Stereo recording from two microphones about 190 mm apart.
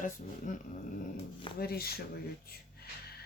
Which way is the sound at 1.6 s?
55° left (ahead or behind).